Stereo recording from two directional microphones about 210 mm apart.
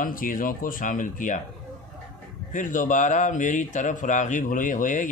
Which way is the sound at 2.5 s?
40° left (ahead or behind).